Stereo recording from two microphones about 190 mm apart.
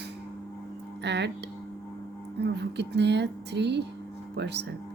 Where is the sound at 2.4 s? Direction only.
65° right (ahead or behind).